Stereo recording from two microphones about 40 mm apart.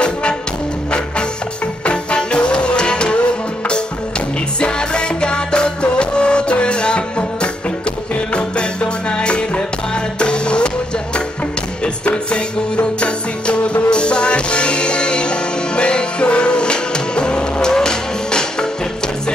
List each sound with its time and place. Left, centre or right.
0.0 s music: left
1.9 s music: left
4.6 s music: left
8.3 s music: left
12.3 s music: left